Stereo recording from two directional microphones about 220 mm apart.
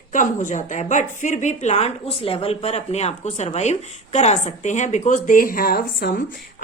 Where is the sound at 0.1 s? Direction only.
35° left (ahead or behind).